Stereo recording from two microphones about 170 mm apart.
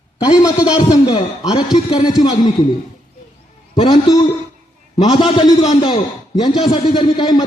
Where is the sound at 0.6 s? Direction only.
25° left (ahead or behind).